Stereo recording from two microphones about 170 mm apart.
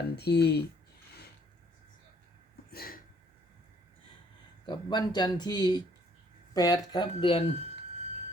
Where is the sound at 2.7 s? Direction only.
60° left (ahead or behind).